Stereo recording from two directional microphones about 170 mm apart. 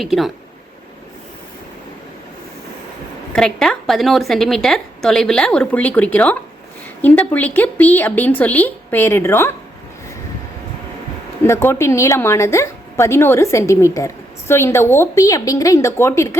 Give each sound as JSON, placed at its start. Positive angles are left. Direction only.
{"t": 0.0, "sound": "speech", "side_deg": 0}
{"t": 3.3, "sound": "a woman's voice", "side_deg": 5}
{"t": 11.4, "sound": "a woman's voice", "side_deg": 15}